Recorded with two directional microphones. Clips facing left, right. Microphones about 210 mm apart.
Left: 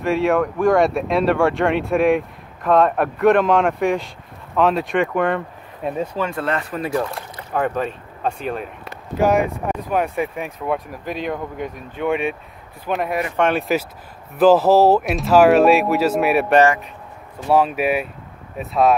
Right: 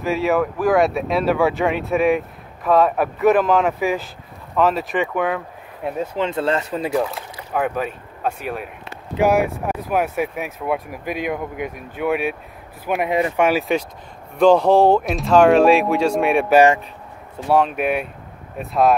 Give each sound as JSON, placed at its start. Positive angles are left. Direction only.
{"t": 0.0, "sound": "speech", "side_deg": 0}
{"t": 6.1, "sound": "speech", "side_deg": -25}
{"t": 6.9, "sound": "speech", "side_deg": 0}